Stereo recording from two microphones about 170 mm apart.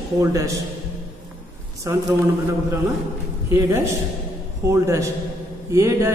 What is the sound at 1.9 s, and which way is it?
Speech, 20° right (ahead or behind).